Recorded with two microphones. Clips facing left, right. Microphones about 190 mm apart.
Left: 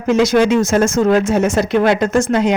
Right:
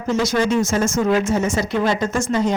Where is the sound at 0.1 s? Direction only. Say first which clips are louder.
Left 6 dB; 70° left (ahead or behind).